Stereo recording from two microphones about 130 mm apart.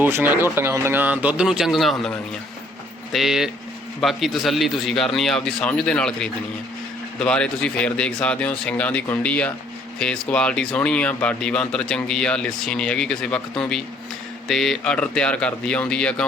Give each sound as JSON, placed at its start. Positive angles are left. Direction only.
{"t": 0.0, "sound": "a man's voice", "side_deg": -15}